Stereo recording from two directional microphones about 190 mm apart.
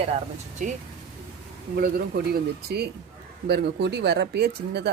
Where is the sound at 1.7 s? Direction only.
55° right (ahead or behind).